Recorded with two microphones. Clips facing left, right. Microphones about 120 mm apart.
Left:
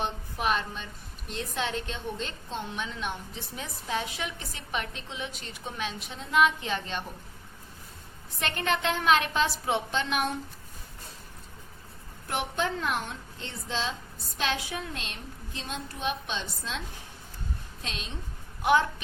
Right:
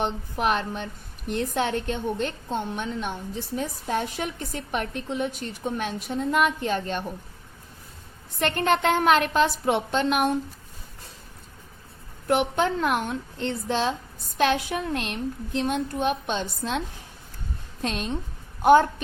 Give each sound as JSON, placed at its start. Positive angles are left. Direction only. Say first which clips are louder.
{"t": 0.0, "sound": "a child's voice", "louder": "right 5 dB", "side_deg": -55}
{"t": 8.4, "sound": "a child's voice", "louder": "right 7 dB", "side_deg": -50}
{"t": 12.3, "sound": "a child's voice", "louder": "right 8 dB", "side_deg": -60}
{"t": 17.8, "sound": "a woman's voice", "louder": "right 11 dB", "side_deg": -50}